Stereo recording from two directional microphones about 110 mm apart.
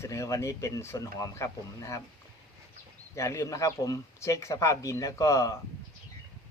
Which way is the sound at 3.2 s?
30° left (ahead or behind).